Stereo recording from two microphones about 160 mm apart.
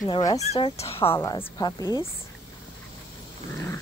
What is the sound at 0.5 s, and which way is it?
Speech, 40° left (ahead or behind).